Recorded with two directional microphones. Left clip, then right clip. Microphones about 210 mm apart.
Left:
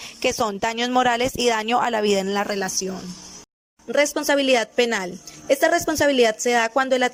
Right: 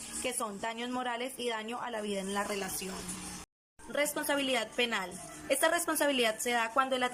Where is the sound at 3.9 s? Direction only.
40° left (ahead or behind).